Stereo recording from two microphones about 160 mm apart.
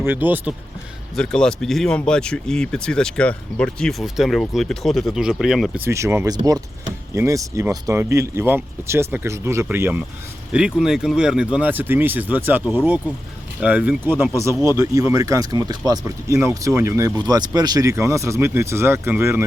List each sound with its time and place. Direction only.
0.0 s speech: 10° right (ahead or behind)
1.1 s speech: 5° left (ahead or behind)
5.8 s speech: 15° right (ahead or behind)